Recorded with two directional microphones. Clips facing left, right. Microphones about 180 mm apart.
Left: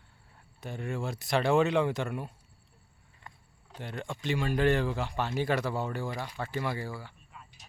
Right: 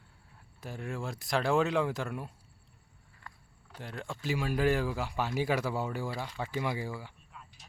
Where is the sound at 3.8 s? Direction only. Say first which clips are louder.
Left 2 dB; centre (ahead or behind).